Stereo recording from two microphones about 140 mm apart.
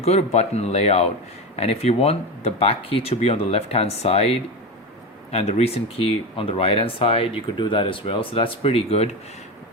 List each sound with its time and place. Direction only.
0.0 s speech: 50° left (ahead or behind)